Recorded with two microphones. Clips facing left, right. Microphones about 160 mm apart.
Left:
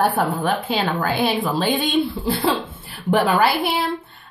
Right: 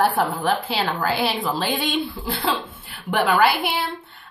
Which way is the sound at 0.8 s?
25° left (ahead or behind).